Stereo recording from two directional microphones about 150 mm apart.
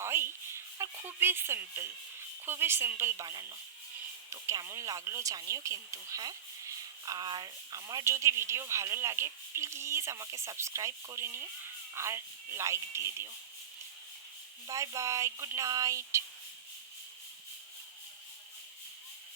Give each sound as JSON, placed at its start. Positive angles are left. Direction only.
{"t": 0.0, "sound": "speech", "side_deg": -15}
{"t": 14.7, "sound": "speech", "side_deg": -20}